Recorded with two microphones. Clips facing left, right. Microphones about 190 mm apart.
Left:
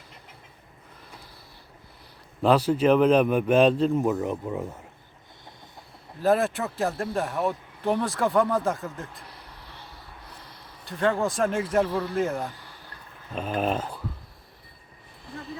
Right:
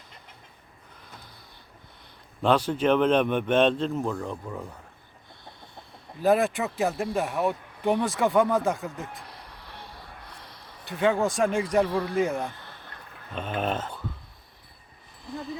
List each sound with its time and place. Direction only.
2.4 s speech: 5° left (ahead or behind)
4.0 s speech: 20° left (ahead or behind)
6.2 s speech: centre (ahead or behind)
9.2 s a sound: 30° left (ahead or behind)
10.8 s speech: centre (ahead or behind)
13.6 s speech: 10° left (ahead or behind)
15.2 s a sound: centre (ahead or behind)